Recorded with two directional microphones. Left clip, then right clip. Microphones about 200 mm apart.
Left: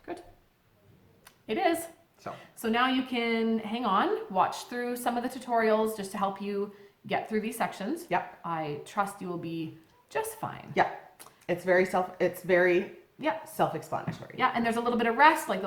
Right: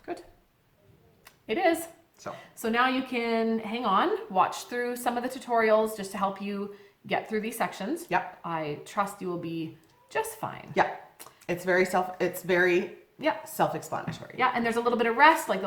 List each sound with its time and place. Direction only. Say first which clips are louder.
1.2 s a sound: right 2 dB; 10° left (ahead or behind)
2.6 s a woman's voice: right 1 dB; 10° left (ahead or behind)
11.4 s a woman's voice: even; 15° right (ahead or behind)
14.3 s a woman's voice: right 1 dB; 10° left (ahead or behind)